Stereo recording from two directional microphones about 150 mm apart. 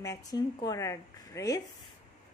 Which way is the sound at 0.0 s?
25° left (ahead or behind).